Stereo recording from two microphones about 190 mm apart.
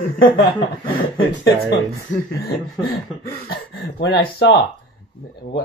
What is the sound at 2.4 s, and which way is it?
Speech, 55° left (ahead or behind).